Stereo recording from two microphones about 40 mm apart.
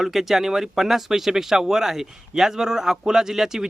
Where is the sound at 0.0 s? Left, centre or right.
Centre.